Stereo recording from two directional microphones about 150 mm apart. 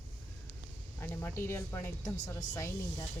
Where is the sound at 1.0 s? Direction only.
15° left (ahead or behind).